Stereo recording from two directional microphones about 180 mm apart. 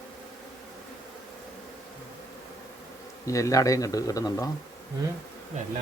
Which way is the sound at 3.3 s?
15° left (ahead or behind).